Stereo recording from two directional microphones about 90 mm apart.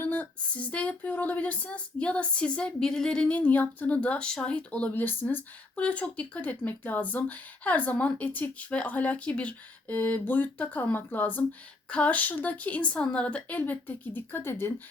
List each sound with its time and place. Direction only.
0.0 s speech: 20° left (ahead or behind)